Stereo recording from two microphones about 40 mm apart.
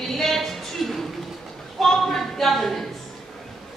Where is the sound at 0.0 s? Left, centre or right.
Centre.